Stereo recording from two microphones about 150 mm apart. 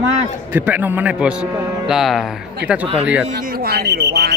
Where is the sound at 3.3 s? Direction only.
70° right (ahead or behind); by 4.3 s 90° right.